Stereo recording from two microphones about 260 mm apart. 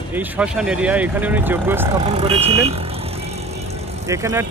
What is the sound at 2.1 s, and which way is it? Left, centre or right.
Speech, right.